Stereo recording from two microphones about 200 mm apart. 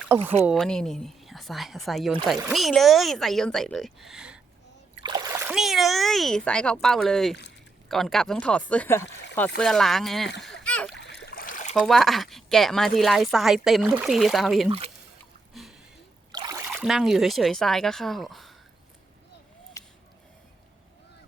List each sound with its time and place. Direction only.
0.1 s a woman's voice: 5° right (ahead or behind)
5.0 s splash: 20° right (ahead or behind)
5.5 s a woman's voice: centre (ahead or behind)
10.4 s splash: 5° left (ahead or behind)
10.9 s a sound: 60° left (ahead or behind); by 11.7 s 40° left (ahead or behind)
11.7 s a woman's voice: centre (ahead or behind)
15.6 s a sound: centre (ahead or behind)
16.3 s splash: 20° right (ahead or behind)
16.7 s a woman's voice: centre (ahead or behind)
19.8 s a sound: 15° left (ahead or behind)